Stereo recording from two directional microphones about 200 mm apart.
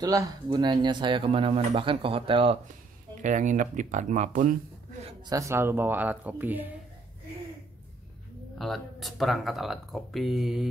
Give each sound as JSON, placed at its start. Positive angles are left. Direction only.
{"t": 0.0, "sound": "speech", "side_deg": -20}
{"t": 3.2, "sound": "speech", "side_deg": -40}
{"t": 5.3, "sound": "speech", "side_deg": -15}
{"t": 8.5, "sound": "speech", "side_deg": 0}